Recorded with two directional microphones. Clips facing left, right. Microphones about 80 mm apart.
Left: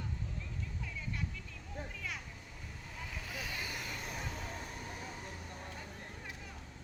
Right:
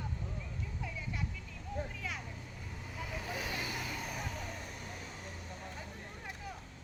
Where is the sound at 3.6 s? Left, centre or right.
Centre.